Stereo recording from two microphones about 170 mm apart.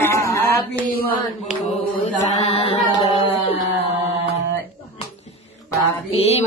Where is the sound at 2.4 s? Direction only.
35° left (ahead or behind).